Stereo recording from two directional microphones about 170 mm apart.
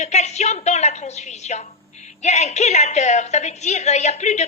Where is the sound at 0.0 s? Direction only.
40° left (ahead or behind).